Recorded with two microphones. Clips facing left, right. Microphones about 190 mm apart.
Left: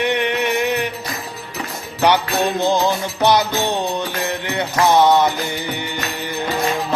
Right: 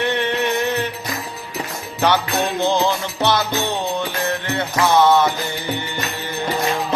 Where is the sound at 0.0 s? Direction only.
15° left (ahead or behind).